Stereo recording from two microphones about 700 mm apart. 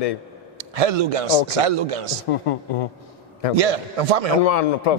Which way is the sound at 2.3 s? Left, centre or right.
Left.